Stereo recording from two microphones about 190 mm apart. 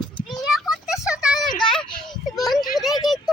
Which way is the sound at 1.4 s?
25° left (ahead or behind).